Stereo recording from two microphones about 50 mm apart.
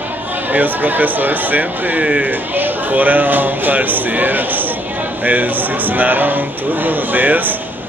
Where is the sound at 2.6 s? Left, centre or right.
Right.